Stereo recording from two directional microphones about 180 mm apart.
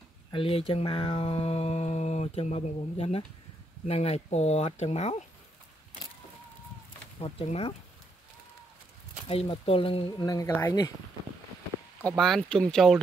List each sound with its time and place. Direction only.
0.3 s speech: 30° left (ahead or behind)
7.2 s speech: 30° left (ahead or behind)
9.3 s speech: 30° left (ahead or behind); by 10.9 s 15° left (ahead or behind)
12.2 s speech: 5° left (ahead or behind)